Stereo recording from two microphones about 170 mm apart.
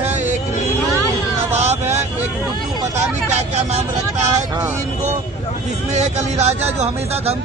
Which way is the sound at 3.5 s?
40° right (ahead or behind).